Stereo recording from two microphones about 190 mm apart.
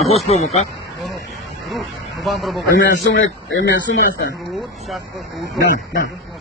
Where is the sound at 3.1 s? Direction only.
70° left (ahead or behind).